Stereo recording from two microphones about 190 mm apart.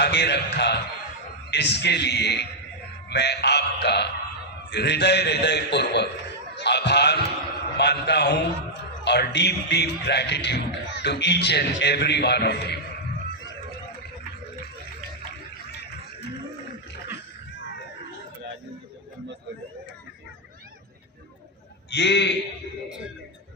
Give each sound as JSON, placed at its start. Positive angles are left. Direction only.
{"t": 0.0, "sound": "a man's voice", "side_deg": 65}
{"t": 6.6, "sound": "a sound", "side_deg": 60}
{"t": 7.8, "sound": "speech", "side_deg": 60}
{"t": 21.8, "sound": "a man's voice", "side_deg": 65}